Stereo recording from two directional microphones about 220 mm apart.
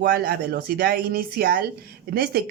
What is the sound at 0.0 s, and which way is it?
Speech, 45° right (ahead or behind).